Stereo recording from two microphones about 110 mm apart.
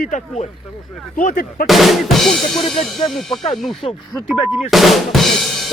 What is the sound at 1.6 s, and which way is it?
Drum, centre (ahead or behind).